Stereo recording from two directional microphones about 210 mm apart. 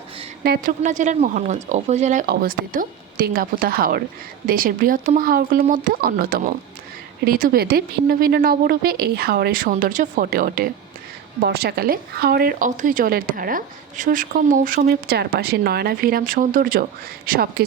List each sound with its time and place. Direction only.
0.4 s a woman's voice: 50° right (ahead or behind)
0.8 s speech: 35° right (ahead or behind)
2.2 s a woman's voice: 45° right (ahead or behind)